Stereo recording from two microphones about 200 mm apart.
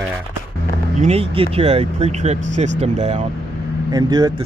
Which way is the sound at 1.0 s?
30° right (ahead or behind).